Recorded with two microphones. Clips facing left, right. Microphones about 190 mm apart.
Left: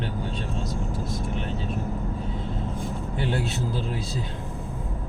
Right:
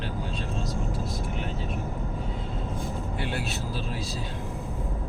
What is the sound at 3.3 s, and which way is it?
Vehicle, 25° left (ahead or behind).